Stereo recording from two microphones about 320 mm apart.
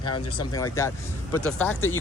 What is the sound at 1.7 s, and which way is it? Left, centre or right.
Speech, left.